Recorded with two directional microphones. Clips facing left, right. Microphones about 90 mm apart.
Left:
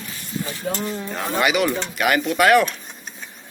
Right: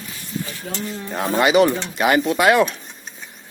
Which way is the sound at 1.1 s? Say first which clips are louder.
Right 5 dB; 30° right (ahead or behind).